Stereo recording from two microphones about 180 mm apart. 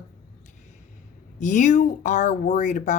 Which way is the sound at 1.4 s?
40° left (ahead or behind).